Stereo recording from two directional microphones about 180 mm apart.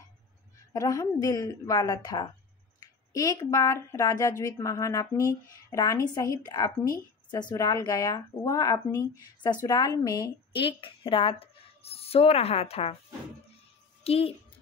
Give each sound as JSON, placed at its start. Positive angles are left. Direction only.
{"t": 0.7, "sound": "a woman's voice", "side_deg": 20}
{"t": 14.0, "sound": "speech", "side_deg": 35}